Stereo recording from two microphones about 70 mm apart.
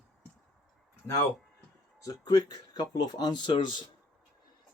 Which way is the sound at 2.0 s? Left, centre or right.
Left.